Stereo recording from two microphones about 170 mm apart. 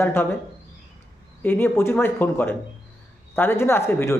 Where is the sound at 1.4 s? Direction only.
10° left (ahead or behind).